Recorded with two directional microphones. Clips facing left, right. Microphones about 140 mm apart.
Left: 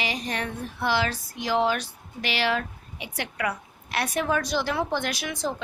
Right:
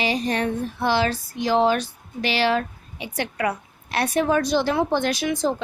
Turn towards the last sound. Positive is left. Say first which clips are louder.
# right 7 dB
turn(degrees=-25)  # may be behind; listen again after turning